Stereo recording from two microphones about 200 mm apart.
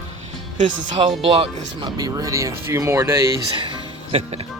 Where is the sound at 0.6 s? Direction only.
40° right (ahead or behind); by 3.8 s 15° right (ahead or behind).